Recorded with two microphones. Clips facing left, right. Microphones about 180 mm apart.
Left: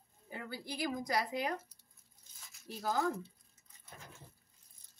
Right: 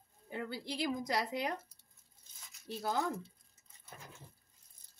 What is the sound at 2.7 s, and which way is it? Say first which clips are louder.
Speech: even; 25° right (ahead or behind).